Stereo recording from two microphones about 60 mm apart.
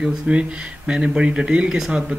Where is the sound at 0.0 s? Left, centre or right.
Centre.